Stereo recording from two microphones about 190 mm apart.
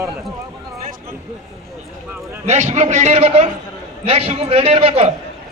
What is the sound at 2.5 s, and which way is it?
A man's voice, 35° right (ahead or behind).